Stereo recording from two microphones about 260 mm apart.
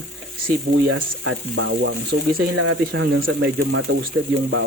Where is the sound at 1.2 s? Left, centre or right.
Right.